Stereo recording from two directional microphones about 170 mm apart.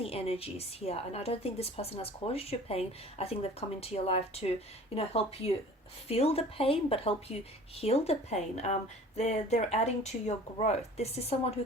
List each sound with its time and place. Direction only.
0.0 s a woman's voice: 35° left (ahead or behind)